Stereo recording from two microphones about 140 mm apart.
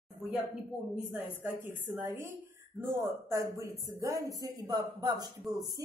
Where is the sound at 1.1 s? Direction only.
15° right (ahead or behind).